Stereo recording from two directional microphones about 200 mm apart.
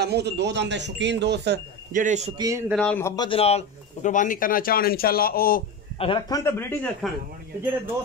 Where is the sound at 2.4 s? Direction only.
15° right (ahead or behind).